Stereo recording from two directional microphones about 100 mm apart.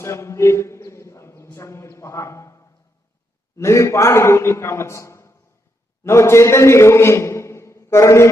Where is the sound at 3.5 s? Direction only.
30° left (ahead or behind).